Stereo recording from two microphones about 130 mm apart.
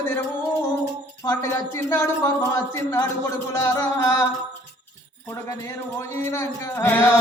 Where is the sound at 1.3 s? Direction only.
25° left (ahead or behind).